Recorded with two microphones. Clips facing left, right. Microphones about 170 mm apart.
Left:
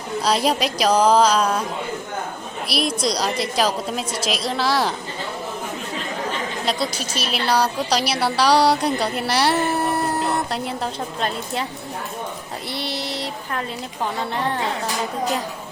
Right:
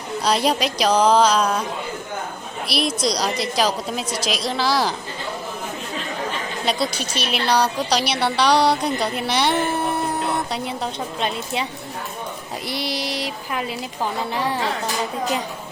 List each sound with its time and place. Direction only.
0.2 s speech: 5° left (ahead or behind)
2.6 s speech: centre (ahead or behind)
7.1 s speech: centre (ahead or behind)
9.0 s a sound: 5° left (ahead or behind)
11.2 s speech: centre (ahead or behind)
12.6 s a sound: 90° right
13.5 s speech: 10° right (ahead or behind)